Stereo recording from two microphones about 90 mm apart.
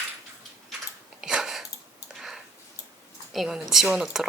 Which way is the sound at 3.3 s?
5° right (ahead or behind).